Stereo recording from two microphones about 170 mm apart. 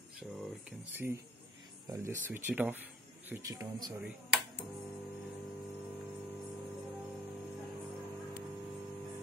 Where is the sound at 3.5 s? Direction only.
25° right (ahead or behind).